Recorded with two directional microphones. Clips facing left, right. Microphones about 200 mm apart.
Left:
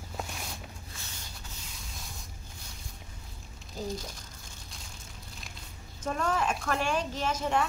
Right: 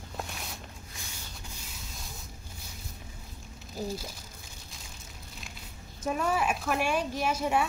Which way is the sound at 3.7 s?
5° right (ahead or behind).